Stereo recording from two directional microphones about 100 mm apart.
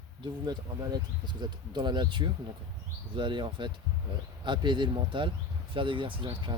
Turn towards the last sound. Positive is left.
turn(degrees=-55)  # may be behind; listen again after turning